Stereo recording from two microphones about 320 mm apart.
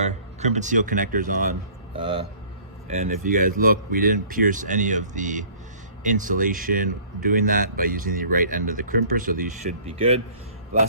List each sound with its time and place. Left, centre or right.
0.0 s speech: right